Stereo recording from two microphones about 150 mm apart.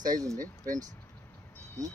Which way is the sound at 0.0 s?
25° right (ahead or behind).